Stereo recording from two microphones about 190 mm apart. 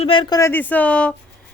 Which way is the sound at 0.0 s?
25° left (ahead or behind).